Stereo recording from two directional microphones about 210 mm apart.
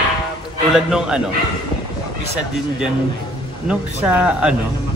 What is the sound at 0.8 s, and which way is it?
Speech, 5° right (ahead or behind).